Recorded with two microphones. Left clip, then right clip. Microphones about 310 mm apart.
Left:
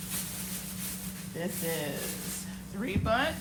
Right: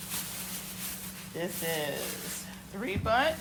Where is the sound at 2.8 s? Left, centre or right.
Right.